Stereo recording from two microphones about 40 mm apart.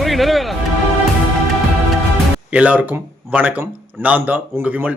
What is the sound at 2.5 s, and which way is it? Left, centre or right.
Speech, right.